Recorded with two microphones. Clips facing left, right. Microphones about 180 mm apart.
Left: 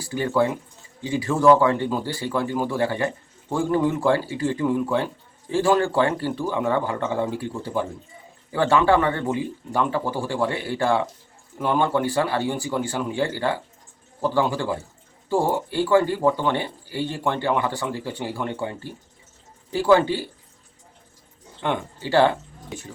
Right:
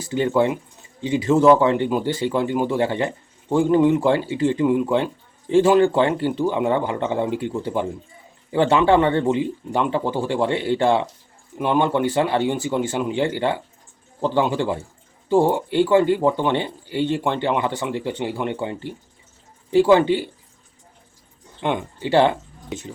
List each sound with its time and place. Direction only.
0.0 s a man's voice: 20° right (ahead or behind)
21.6 s speech: 20° right (ahead or behind)